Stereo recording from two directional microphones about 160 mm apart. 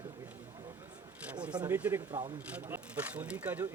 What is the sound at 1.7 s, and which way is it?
Speech, 10° right (ahead or behind).